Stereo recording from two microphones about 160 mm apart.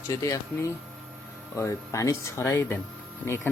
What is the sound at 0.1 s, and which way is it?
Speech, 20° left (ahead or behind).